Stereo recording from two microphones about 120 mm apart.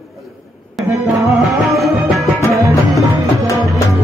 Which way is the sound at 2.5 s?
25° right (ahead or behind).